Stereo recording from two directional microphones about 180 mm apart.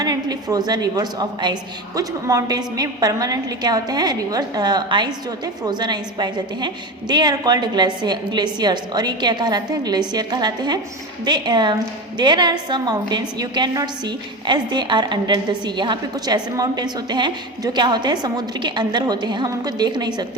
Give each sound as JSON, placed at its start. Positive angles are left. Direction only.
{"t": 0.0, "sound": "a woman's voice", "side_deg": -20}